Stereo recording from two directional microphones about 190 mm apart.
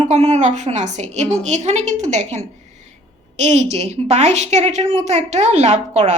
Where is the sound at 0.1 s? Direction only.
35° right (ahead or behind).